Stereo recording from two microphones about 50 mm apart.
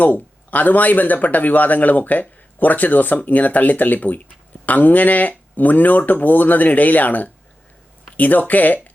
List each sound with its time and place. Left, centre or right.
0.0 s speech: left